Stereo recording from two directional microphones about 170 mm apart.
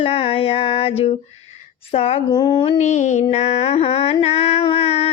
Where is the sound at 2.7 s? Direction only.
40° left (ahead or behind).